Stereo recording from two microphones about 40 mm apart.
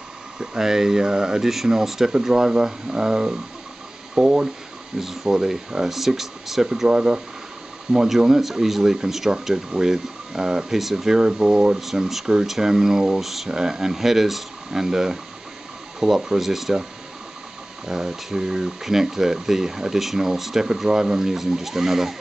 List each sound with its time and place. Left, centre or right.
0.4 s speech: centre
6.9 s speech: right; by 11.1 s centre
11.1 s speech: centre
11.8 s speech: centre
13.2 s speech: centre
17.8 s speech: centre